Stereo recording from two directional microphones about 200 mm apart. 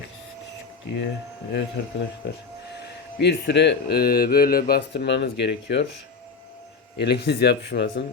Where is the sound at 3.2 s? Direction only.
60° left (ahead or behind).